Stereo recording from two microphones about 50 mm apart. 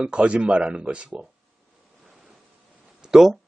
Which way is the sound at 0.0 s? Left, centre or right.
Right.